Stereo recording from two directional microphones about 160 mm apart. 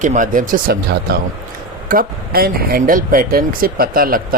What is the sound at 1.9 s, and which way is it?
Speech, 65° right (ahead or behind).